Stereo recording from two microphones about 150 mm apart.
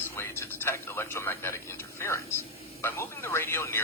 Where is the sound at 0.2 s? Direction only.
15° left (ahead or behind).